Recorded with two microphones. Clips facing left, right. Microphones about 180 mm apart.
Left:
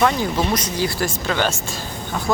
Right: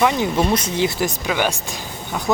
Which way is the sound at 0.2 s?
25° right (ahead or behind).